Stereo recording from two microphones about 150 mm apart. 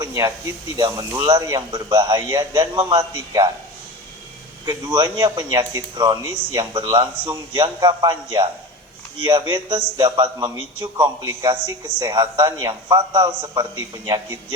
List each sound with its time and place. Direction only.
0.0 s a man's voice: 20° right (ahead or behind)
4.6 s a man's voice: 30° right (ahead or behind)